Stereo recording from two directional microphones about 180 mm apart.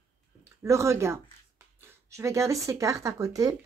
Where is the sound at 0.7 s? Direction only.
15° right (ahead or behind).